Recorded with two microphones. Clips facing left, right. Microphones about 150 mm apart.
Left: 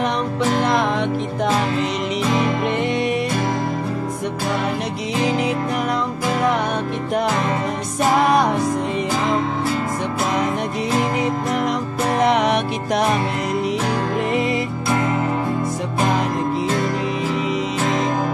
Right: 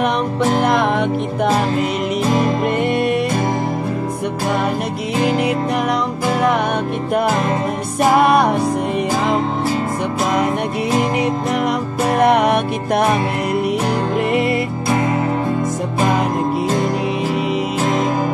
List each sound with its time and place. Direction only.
0.0 s music: 55° right (ahead or behind)
2.3 s music: 45° right (ahead or behind)
8.2 s music: 60° right (ahead or behind)
11.1 s music: 70° right (ahead or behind)
12.2 s music: 55° right (ahead or behind)
14.3 s music: 65° right (ahead or behind)